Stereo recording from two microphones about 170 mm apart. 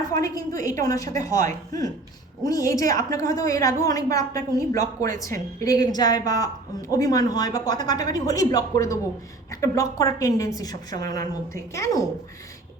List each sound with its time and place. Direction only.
0.1 s a woman's voice: 20° left (ahead or behind)